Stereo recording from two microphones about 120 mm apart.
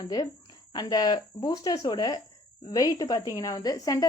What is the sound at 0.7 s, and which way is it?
A woman's voice, 35° left (ahead or behind).